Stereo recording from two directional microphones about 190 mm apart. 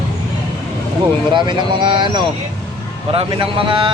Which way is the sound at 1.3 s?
25° right (ahead or behind).